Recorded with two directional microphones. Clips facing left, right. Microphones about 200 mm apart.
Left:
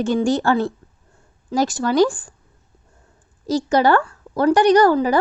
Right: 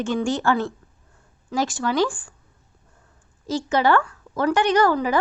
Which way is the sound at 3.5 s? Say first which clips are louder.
Left 4 dB; 40° left (ahead or behind).